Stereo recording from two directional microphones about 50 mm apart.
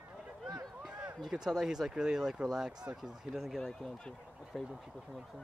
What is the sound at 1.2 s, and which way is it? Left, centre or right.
Speech, centre.